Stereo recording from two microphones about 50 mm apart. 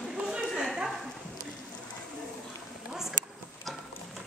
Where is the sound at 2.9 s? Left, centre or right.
Centre.